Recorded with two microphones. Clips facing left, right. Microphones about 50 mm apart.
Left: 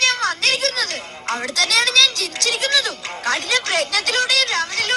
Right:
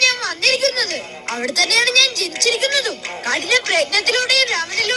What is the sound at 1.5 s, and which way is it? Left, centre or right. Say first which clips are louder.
Speech: right 1 dB; right.